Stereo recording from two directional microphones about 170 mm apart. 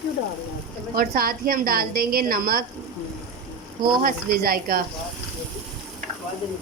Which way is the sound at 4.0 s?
55° right (ahead or behind).